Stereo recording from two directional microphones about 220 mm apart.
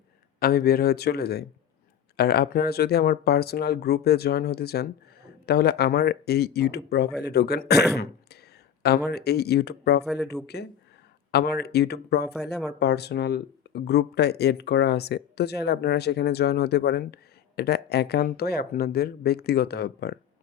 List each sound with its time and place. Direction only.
0.3 s speech: 45° left (ahead or behind)